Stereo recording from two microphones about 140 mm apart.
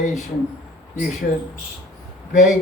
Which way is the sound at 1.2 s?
90° left.